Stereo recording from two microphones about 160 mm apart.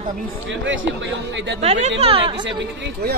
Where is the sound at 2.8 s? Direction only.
75° right (ahead or behind).